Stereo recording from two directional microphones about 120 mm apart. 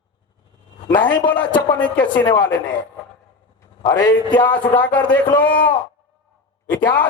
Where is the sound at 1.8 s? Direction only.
10° left (ahead or behind).